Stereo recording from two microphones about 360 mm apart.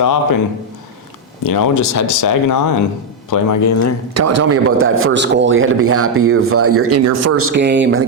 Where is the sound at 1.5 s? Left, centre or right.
Left.